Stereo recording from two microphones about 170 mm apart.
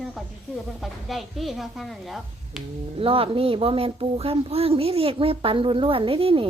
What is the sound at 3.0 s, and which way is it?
Speech, 35° right (ahead or behind).